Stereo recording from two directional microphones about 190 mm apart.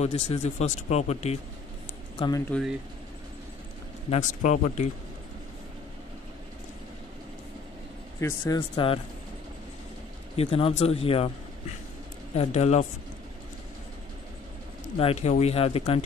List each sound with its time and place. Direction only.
0.0 s a man's voice: 35° left (ahead or behind)
2.1 s speech: 25° left (ahead or behind)
4.1 s a man's voice: 40° left (ahead or behind)
8.2 s speech: 15° left (ahead or behind)
10.3 s a man's voice: 30° left (ahead or behind)
12.4 s a man's voice: 35° left (ahead or behind)
15.0 s a man's voice: 30° left (ahead or behind)